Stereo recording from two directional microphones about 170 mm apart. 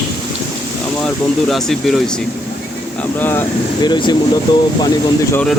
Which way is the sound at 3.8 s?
25° left (ahead or behind).